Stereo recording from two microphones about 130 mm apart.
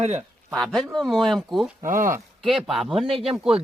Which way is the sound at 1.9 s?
90° right.